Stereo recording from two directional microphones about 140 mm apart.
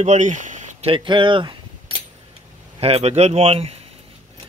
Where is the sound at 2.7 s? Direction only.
45° right (ahead or behind).